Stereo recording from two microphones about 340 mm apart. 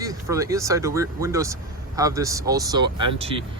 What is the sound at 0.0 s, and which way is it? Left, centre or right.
Speech, centre.